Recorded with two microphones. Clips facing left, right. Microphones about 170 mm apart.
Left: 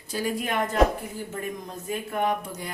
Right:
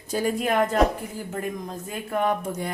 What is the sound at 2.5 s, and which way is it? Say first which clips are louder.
Speech: right 6 dB; 50° right (ahead or behind).